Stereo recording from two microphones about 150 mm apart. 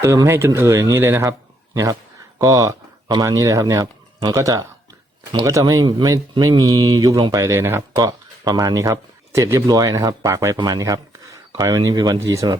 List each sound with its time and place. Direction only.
0.0 s speech: 20° right (ahead or behind)